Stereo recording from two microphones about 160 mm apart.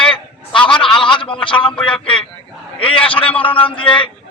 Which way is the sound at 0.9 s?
30° left (ahead or behind).